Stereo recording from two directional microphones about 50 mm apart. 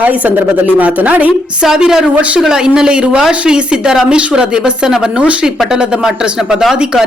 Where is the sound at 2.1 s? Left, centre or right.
Right.